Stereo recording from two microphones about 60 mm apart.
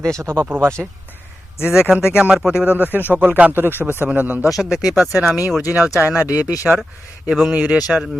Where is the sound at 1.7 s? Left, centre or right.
Centre.